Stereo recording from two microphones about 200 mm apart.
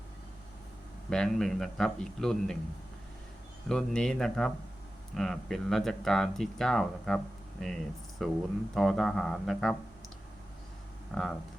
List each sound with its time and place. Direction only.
1.1 s speech: 5° left (ahead or behind)
3.7 s speech: 5° left (ahead or behind)
8.2 s speech: centre (ahead or behind)
11.1 s speech: centre (ahead or behind)